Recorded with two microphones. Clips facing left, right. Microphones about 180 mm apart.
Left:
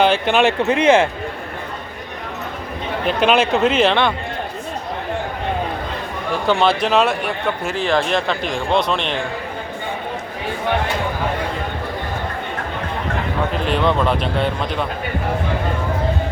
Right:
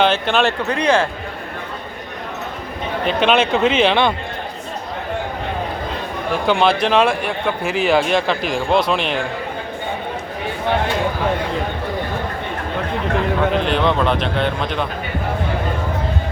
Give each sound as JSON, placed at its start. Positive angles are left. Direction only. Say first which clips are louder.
{"t": 0.0, "sound": "speech", "louder": "left 1 dB", "side_deg": 10}
{"t": 3.1, "sound": "speech", "louder": "even", "side_deg": 5}
{"t": 6.5, "sound": "speech", "louder": "even", "side_deg": 0}
{"t": 13.7, "sound": "speech", "louder": "even", "side_deg": 0}